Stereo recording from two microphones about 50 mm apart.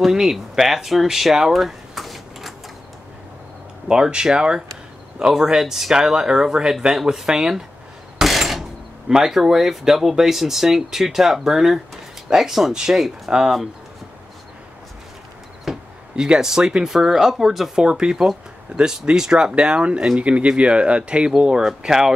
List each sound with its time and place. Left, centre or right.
0.0 s speech: centre
3.9 s speech: centre
8.2 s a sound: centre
9.1 s speech: centre
15.6 s speech: centre